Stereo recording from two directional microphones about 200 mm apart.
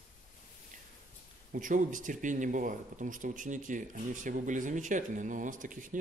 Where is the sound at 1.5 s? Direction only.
40° right (ahead or behind).